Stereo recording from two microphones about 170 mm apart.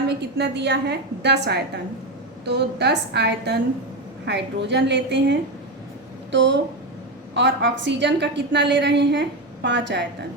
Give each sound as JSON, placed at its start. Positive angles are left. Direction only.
{"t": 0.1, "sound": "a woman's voice", "side_deg": -80}